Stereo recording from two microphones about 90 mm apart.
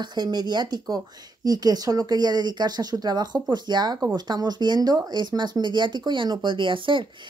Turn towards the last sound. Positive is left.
turn(degrees=-65)  # may be behind; listen again after turning